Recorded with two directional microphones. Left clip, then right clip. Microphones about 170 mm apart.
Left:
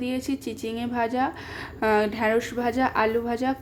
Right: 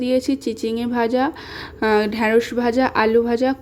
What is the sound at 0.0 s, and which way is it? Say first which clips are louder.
A woman's voice: right 10 dB; 25° right (ahead or behind).